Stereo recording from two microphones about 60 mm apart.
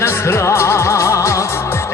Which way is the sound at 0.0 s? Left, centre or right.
Left.